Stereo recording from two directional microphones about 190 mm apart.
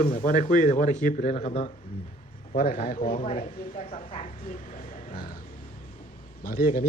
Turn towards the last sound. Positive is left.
turn(degrees=50)  # may be behind; listen again after turning